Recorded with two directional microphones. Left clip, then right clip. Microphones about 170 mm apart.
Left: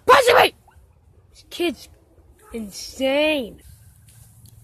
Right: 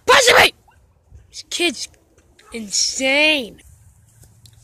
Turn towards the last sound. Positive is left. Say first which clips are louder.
# right 4 dB
turn(degrees=0)  # may be behind; listen again after turning